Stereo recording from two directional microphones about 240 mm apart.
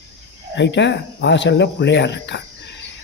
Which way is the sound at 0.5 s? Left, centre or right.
Left.